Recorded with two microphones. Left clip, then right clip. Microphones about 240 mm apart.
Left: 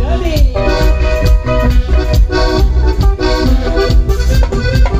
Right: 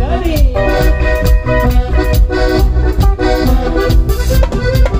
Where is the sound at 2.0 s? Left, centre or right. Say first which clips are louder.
Even; left.